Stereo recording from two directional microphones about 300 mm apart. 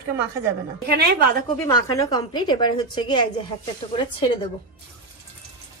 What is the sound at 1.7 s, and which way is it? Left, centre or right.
A woman's voice, centre.